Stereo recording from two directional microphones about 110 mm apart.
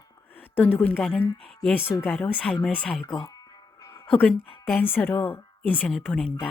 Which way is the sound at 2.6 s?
10° left (ahead or behind).